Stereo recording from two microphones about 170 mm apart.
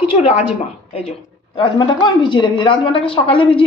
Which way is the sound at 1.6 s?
30° left (ahead or behind).